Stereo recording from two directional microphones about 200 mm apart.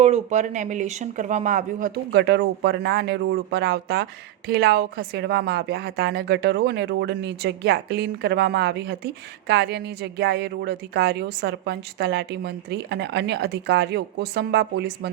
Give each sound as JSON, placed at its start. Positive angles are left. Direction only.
{"t": 0.0, "sound": "speech", "side_deg": -35}
{"t": 2.1, "sound": "speech", "side_deg": -55}